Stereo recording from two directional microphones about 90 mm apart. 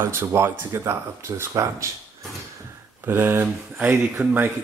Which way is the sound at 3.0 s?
25° right (ahead or behind).